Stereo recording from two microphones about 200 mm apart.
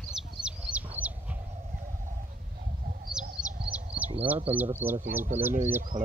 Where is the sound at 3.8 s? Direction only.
30° right (ahead or behind).